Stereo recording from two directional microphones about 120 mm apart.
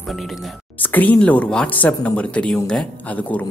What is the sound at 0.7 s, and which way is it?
Speech, 15° left (ahead or behind).